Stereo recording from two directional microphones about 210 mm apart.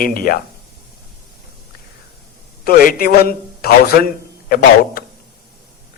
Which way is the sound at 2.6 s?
45° left (ahead or behind).